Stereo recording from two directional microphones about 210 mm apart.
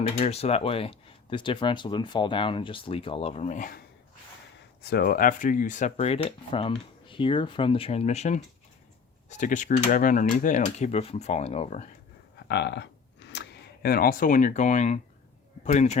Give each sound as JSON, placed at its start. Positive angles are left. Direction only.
{"t": 0.2, "sound": "speech", "side_deg": 30}
{"t": 4.8, "sound": "speech", "side_deg": 50}
{"t": 12.5, "sound": "speech", "side_deg": 55}